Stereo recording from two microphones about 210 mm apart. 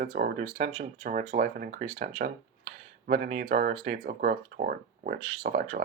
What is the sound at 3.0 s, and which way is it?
Speech, 45° right (ahead or behind).